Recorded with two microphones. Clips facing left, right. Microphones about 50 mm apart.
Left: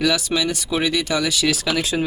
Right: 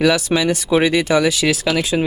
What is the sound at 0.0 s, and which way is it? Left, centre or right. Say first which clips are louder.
Speech: right 5 dB; right.